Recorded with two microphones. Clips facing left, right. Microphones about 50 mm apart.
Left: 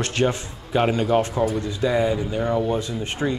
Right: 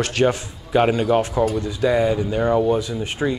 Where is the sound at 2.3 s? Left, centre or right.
Right.